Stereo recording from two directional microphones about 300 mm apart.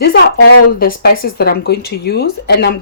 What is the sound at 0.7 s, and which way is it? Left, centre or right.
Speech, left.